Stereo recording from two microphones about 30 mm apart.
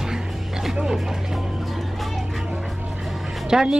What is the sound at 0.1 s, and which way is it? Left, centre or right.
Music, centre.